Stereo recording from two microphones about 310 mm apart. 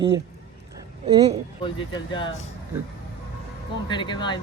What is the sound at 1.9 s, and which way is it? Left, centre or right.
Speech, centre.